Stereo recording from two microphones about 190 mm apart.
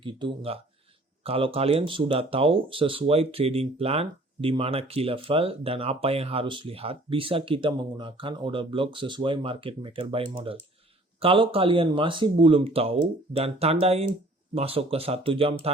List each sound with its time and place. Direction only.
0.0 s speech: 25° right (ahead or behind)